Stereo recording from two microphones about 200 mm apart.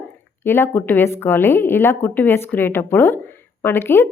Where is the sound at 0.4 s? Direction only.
10° left (ahead or behind).